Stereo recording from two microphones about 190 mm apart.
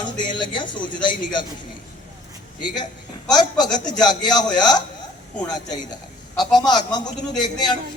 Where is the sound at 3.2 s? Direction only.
20° left (ahead or behind).